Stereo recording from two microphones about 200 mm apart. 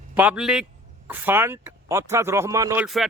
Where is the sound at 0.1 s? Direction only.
5° right (ahead or behind).